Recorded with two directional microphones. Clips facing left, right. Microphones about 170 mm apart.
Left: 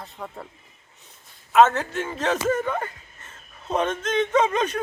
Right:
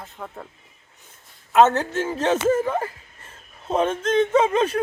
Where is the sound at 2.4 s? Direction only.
30° right (ahead or behind).